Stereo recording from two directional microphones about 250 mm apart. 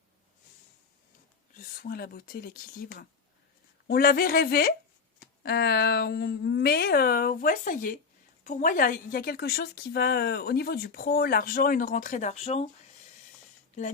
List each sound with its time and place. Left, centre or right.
1.5 s a woman's voice: left